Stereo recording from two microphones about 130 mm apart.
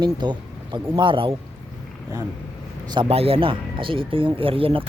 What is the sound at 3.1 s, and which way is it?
Speech, 50° right (ahead or behind).